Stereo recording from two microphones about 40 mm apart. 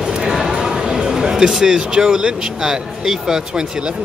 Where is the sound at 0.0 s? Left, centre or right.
Centre.